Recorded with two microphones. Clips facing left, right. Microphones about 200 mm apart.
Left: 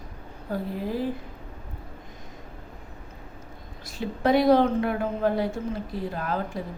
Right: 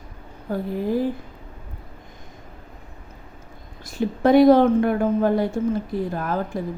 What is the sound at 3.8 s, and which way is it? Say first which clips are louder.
A woman's voice: right 6 dB; 50° right (ahead or behind).